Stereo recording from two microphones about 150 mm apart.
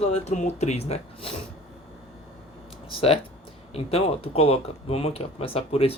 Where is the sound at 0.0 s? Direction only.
50° left (ahead or behind).